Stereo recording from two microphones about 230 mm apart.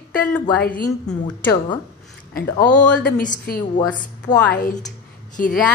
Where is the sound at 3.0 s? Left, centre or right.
Left.